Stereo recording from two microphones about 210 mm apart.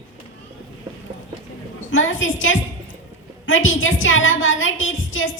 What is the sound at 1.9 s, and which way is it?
A child's voice, 70° left (ahead or behind).